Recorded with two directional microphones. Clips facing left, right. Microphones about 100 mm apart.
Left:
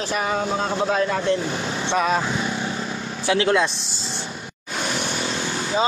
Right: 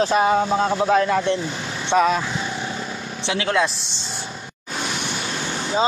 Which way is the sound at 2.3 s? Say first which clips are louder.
Left 2 dB; 30° left (ahead or behind).